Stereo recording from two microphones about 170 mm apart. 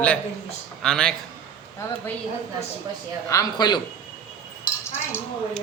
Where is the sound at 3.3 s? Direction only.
20° left (ahead or behind).